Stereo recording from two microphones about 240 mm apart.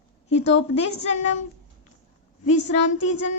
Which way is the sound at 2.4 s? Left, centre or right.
Left.